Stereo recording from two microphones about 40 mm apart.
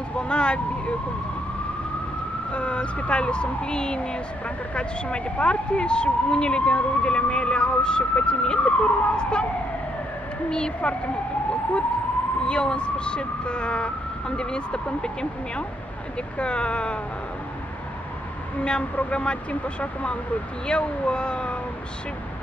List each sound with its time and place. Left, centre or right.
0.2 s vehicle: left
2.5 s speech: left
12.4 s speech: left
16.3 s speech: left
18.6 s speech: left